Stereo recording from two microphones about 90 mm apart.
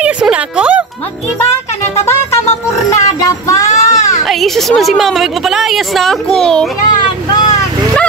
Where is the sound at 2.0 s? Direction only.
35° left (ahead or behind).